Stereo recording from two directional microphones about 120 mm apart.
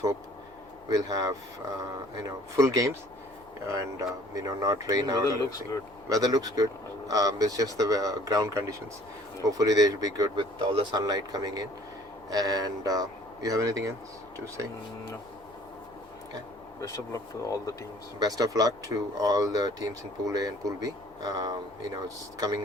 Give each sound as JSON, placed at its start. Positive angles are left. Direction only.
{"t": 0.9, "sound": "speech", "side_deg": -30}
{"t": 10.6, "sound": "speech", "side_deg": -45}
{"t": 11.0, "sound": "speech", "side_deg": -30}
{"t": 16.8, "sound": "speech", "side_deg": 30}
{"t": 18.2, "sound": "speech", "side_deg": -30}